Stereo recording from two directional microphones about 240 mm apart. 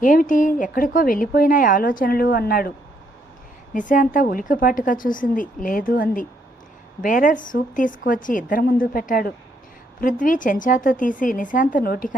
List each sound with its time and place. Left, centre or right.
0.0 s a woman's voice: left
3.8 s a woman's voice: left